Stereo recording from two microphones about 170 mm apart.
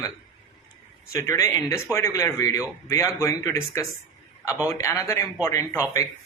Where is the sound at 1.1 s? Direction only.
15° left (ahead or behind).